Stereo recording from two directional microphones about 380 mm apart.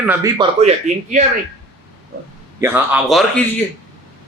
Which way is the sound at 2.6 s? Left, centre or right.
Centre.